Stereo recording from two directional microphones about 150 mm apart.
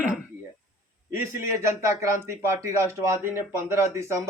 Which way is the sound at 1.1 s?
20° right (ahead or behind).